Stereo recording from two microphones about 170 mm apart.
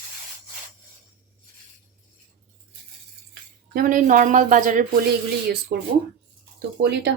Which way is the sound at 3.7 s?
55° right (ahead or behind).